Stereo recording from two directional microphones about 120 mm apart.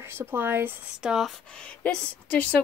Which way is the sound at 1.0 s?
5° right (ahead or behind).